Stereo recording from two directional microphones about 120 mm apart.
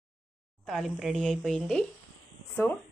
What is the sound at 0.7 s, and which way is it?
A woman's voice, centre (ahead or behind).